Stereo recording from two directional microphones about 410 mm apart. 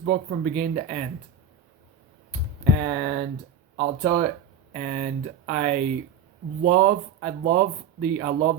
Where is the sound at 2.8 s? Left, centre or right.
Right.